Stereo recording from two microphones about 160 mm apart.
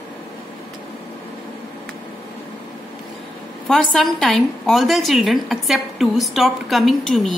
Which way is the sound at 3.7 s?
Centre (ahead or behind).